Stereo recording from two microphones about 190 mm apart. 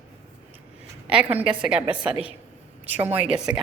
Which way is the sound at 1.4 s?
5° right (ahead or behind).